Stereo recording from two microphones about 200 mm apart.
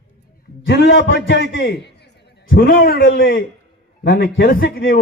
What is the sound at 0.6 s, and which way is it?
A man's voice, 65° left (ahead or behind).